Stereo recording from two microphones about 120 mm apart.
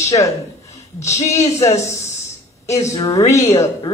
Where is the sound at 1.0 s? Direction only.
65° left (ahead or behind).